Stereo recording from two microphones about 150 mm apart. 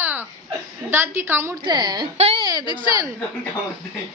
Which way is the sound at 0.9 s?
15° right (ahead or behind).